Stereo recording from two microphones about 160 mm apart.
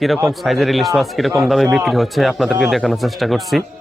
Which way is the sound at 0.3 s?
Centre (ahead or behind).